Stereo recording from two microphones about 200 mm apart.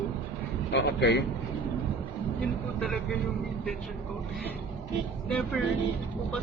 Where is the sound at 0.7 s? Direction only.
60° left (ahead or behind).